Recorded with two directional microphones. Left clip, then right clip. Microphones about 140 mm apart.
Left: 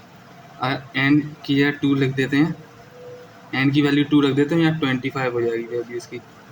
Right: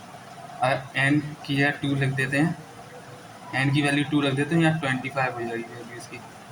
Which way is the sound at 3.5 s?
30° left (ahead or behind).